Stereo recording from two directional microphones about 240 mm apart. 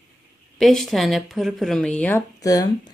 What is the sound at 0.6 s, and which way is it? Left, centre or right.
A woman's voice, centre.